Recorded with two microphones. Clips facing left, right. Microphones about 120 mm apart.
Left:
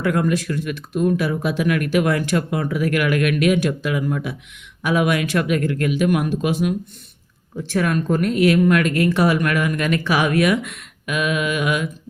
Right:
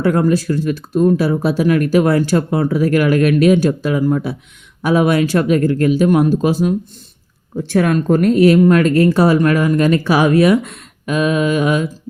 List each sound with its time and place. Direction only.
0.0 s speech: 35° right (ahead or behind)